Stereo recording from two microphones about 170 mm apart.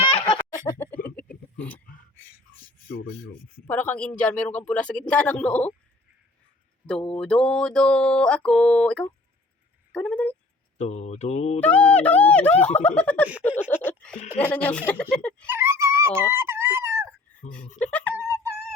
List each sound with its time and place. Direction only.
0.3 s a sound: 20° left (ahead or behind)
2.9 s speech: 60° left (ahead or behind)
3.7 s speech: 10° left (ahead or behind)
6.8 s mantra: 5° left (ahead or behind)
9.9 s speech: 5° left (ahead or behind)
10.8 s speech: 45° left (ahead or behind)
11.6 s speech: 10° left (ahead or behind)
13.8 s a sound: 5° left (ahead or behind)
14.3 s speech: 10° left (ahead or behind)
15.4 s a sound: 15° right (ahead or behind)
17.7 s speech: 10° left (ahead or behind)
18.2 s a sound: 15° right (ahead or behind)